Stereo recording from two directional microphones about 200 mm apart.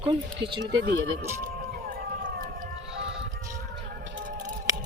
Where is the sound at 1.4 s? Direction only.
45° right (ahead or behind).